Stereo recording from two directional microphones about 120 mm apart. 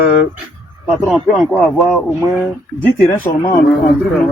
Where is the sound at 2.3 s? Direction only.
15° left (ahead or behind).